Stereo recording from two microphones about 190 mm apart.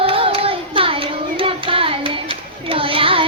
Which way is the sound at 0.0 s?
30° right (ahead or behind).